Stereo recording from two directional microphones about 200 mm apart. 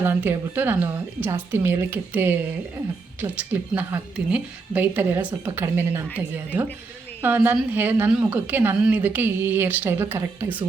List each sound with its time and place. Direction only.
0.0 s a woman's voice: 10° right (ahead or behind)